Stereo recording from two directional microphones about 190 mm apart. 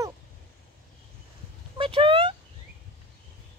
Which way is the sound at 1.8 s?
30° right (ahead or behind).